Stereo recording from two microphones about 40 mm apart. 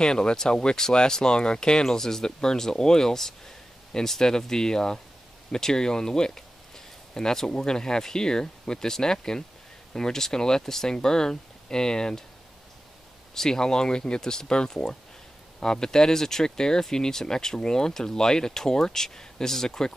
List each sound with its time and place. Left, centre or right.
0.0 s speech: left
13.3 s speech: centre